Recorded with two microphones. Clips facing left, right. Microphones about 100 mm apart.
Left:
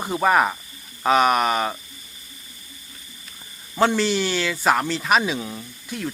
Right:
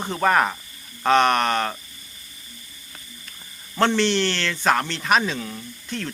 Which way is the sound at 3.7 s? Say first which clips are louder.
Even; 5° left (ahead or behind).